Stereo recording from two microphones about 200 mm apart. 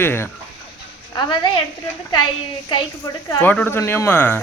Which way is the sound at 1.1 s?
20° left (ahead or behind).